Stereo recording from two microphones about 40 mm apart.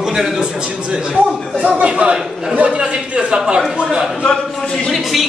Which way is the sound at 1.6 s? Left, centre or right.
Right.